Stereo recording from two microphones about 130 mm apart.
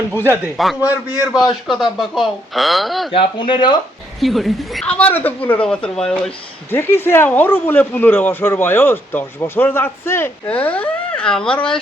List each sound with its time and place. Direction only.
0.5 s a woman's voice: centre (ahead or behind)
3.1 s speech: 40° left (ahead or behind)
4.2 s a woman's voice: centre (ahead or behind)
6.7 s speech: 15° left (ahead or behind)